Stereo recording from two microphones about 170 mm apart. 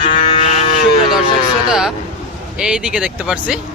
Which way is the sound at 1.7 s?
5° right (ahead or behind).